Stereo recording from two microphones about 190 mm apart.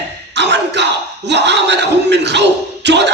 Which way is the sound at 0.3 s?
65° right (ahead or behind).